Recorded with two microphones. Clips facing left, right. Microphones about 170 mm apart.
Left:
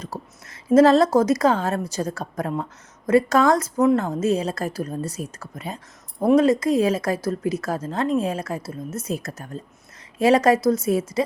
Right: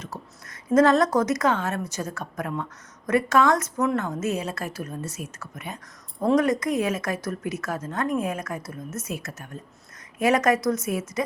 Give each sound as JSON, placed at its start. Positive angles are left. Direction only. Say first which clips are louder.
{"t": 0.0, "sound": "a woman's voice", "louder": "left 4 dB", "side_deg": 30}